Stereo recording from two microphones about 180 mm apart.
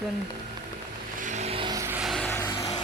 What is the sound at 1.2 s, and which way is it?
Vehicle, 40° right (ahead or behind).